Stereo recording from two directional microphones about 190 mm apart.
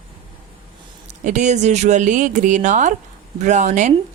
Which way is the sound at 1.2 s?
40° right (ahead or behind).